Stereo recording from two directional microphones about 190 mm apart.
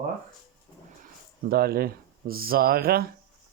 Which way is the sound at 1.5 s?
55° right (ahead or behind).